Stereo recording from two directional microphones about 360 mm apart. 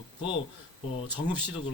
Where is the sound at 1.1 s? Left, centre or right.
Centre.